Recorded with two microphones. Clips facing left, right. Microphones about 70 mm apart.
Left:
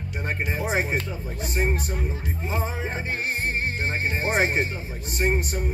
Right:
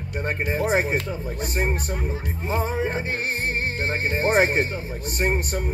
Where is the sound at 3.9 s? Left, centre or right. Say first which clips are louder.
Right 6 dB; right.